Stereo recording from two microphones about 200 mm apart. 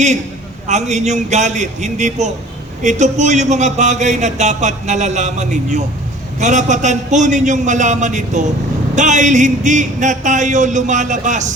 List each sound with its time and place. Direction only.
0.7 s a man's voice: 35° right (ahead or behind)